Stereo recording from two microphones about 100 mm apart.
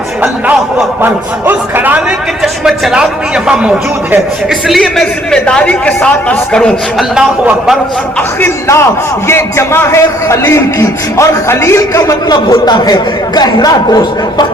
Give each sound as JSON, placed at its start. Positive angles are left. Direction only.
{"t": 1.0, "sound": "a man's voice", "side_deg": -20}
{"t": 2.4, "sound": "a man's voice", "side_deg": -5}
{"t": 4.4, "sound": "a man's voice", "side_deg": 0}
{"t": 7.2, "sound": "speech", "side_deg": -5}
{"t": 8.4, "sound": "a man's voice", "side_deg": 25}
{"t": 12.3, "sound": "speech", "side_deg": 40}